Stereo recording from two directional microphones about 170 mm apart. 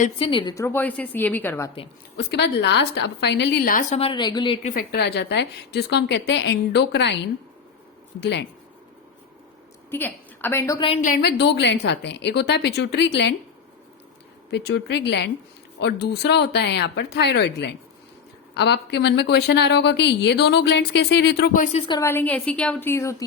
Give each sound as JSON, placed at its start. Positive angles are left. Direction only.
{"t": 0.0, "sound": "a woman's voice", "side_deg": 30}
{"t": 0.5, "sound": "a woman's voice", "side_deg": 15}
{"t": 2.1, "sound": "a woman's voice", "side_deg": 80}
{"t": 3.7, "sound": "a woman's voice", "side_deg": 50}
{"t": 4.8, "sound": "a woman's voice", "side_deg": 75}
{"t": 8.2, "sound": "speech", "side_deg": 90}
{"t": 9.9, "sound": "a woman's voice", "side_deg": 15}
{"t": 10.8, "sound": "a woman's voice", "side_deg": 30}
{"t": 11.0, "sound": "a woman's voice", "side_deg": 65}
{"t": 14.5, "sound": "a woman's voice", "side_deg": 85}
{"t": 21.5, "sound": "speech", "side_deg": 45}
{"t": 21.8, "sound": "a woman's voice", "side_deg": 20}